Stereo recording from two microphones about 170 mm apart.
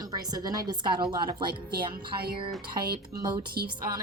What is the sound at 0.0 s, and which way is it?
A woman's voice, 20° right (ahead or behind).